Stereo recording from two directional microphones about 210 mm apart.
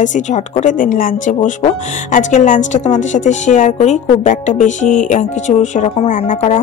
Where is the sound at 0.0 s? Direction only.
35° left (ahead or behind).